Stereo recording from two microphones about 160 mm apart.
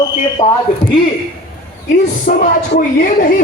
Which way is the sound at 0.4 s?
35° left (ahead or behind).